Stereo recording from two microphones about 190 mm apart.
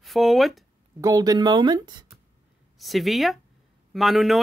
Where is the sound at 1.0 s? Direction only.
20° right (ahead or behind).